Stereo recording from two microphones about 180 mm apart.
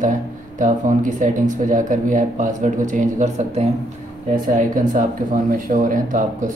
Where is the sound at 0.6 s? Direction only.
45° right (ahead or behind).